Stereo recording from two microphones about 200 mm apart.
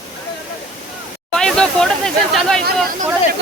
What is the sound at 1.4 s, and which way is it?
Speech, 5° left (ahead or behind).